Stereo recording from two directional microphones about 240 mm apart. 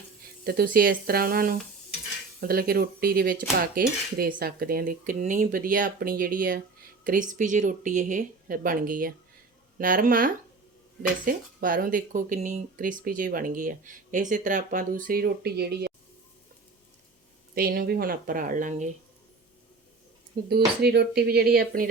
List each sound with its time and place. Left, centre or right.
0.4 s speech: right
17.5 s speech: right
20.8 s speech: right